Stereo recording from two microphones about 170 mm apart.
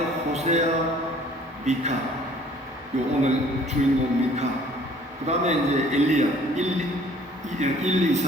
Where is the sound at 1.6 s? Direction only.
40° right (ahead or behind).